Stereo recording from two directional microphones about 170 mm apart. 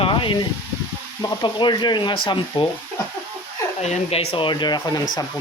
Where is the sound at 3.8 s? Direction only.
40° left (ahead or behind); by 5.0 s 25° left (ahead or behind).